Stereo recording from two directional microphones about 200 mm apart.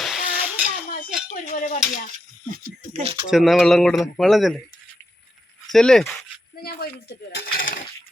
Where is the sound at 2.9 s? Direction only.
30° right (ahead or behind).